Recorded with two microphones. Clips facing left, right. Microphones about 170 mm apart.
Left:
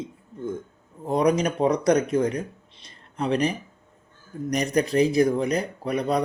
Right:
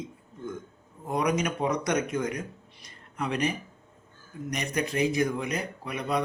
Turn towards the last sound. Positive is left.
turn(degrees=35)  # may be behind; listen again after turning